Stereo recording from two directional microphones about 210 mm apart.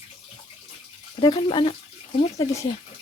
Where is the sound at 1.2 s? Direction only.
25° left (ahead or behind).